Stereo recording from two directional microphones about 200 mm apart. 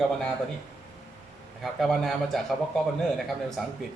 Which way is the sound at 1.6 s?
Centre (ahead or behind).